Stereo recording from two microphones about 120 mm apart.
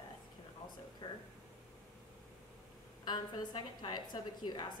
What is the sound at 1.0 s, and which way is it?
Speech, 40° left (ahead or behind).